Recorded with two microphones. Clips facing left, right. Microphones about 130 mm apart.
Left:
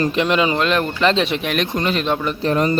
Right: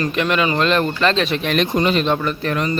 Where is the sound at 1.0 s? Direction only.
20° left (ahead or behind).